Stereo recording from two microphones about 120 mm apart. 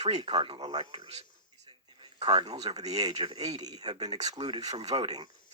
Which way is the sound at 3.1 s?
60° right (ahead or behind).